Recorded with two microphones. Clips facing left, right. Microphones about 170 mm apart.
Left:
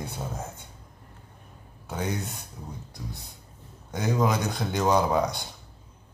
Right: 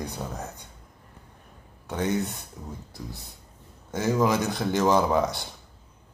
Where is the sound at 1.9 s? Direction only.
Centre (ahead or behind).